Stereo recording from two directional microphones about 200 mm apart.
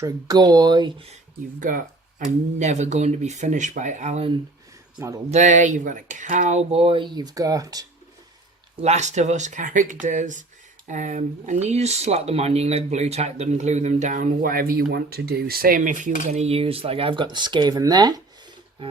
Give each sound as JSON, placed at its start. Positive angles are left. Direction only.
{"t": 0.0, "sound": "speech", "side_deg": -20}
{"t": 1.1, "sound": "speech", "side_deg": -40}
{"t": 4.9, "sound": "speech", "side_deg": -15}
{"t": 5.3, "sound": "speech", "side_deg": -35}
{"t": 8.7, "sound": "speech", "side_deg": -35}